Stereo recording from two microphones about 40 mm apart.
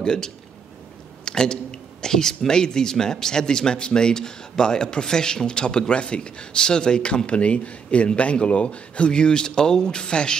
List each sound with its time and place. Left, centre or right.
0.0 s speech: centre